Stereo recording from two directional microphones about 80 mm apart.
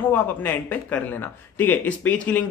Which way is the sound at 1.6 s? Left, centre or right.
Centre.